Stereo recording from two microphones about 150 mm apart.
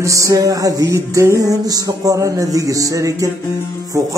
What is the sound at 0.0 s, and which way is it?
Music, 20° right (ahead or behind).